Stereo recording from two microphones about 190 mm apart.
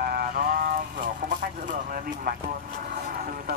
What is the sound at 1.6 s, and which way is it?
Speech, 50° right (ahead or behind).